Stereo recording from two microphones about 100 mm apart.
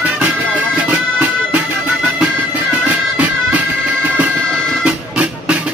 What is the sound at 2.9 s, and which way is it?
Music, 15° right (ahead or behind).